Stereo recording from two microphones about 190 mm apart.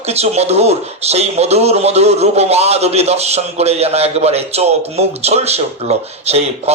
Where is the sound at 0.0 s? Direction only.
35° right (ahead or behind).